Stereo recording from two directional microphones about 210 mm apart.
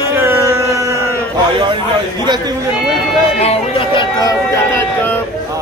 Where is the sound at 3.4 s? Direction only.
25° left (ahead or behind).